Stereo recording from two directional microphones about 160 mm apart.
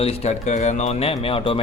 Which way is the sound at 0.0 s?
40° left (ahead or behind).